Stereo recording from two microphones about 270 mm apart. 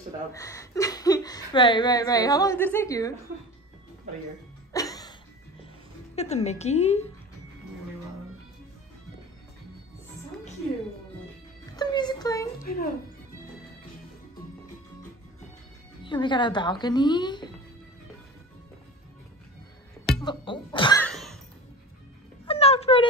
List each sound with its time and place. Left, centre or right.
0.3 s speech: centre
4.7 s music: centre
6.1 s a woman's voice: left
11.7 s music: centre
12.6 s speech: left
16.0 s speech: centre
20.2 s speech: centre
21.0 s a sound: centre
22.5 s a sound: left